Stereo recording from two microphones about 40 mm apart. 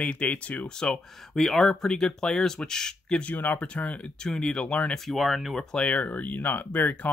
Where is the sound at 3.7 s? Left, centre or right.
Left.